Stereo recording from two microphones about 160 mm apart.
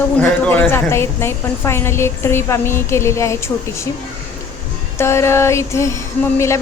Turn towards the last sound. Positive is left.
turn(degrees=15)  # may be behind; listen again after turning